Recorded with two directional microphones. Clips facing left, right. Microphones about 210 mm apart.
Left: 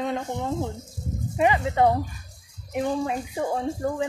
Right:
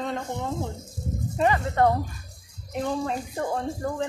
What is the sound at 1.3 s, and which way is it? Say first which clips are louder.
Speech: left 2 dB; 15° left (ahead or behind).